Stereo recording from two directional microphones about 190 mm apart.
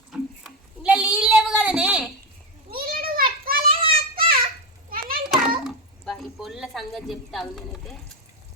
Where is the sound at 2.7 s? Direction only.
50° right (ahead or behind).